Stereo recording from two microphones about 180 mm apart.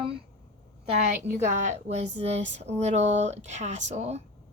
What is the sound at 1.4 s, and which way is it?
Speech, 40° right (ahead or behind).